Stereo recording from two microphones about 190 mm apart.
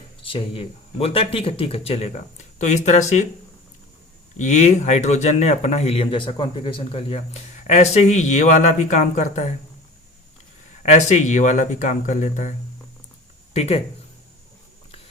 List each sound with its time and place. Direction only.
0.2 s speech: 30° left (ahead or behind)
4.4 s speech: 35° left (ahead or behind)
10.8 s speech: 40° left (ahead or behind)